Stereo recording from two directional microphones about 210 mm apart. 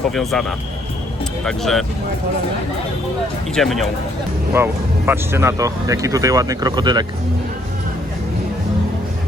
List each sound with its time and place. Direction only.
0.1 s speech: centre (ahead or behind)
3.5 s speech: centre (ahead or behind)
4.5 s speech: 10° right (ahead or behind)